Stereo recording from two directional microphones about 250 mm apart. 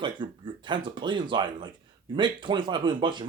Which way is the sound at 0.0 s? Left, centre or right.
Centre.